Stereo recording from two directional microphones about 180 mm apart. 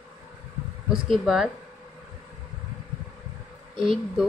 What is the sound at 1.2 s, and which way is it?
Speech, 5° right (ahead or behind).